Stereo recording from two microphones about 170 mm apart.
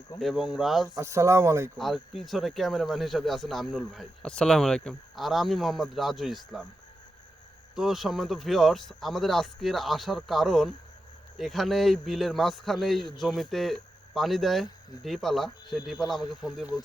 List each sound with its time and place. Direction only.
0.2 s speech: centre (ahead or behind)
0.9 s speech: 20° right (ahead or behind)
1.8 s speech: centre (ahead or behind)
7.8 s speech: centre (ahead or behind)